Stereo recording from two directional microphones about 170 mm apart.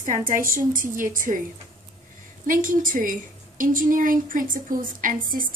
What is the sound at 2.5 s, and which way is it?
A woman's voice, 50° right (ahead or behind).